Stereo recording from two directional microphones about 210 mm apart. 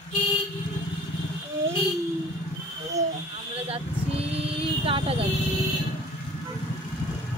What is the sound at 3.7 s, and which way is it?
Vehicle, 30° right (ahead or behind).